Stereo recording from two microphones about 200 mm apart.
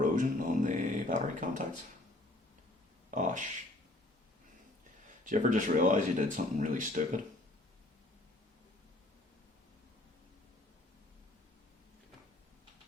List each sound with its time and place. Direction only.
0.0 s a sound: 40° right (ahead or behind)
3.1 s speech: 40° right (ahead or behind)
5.2 s speech: 40° right (ahead or behind)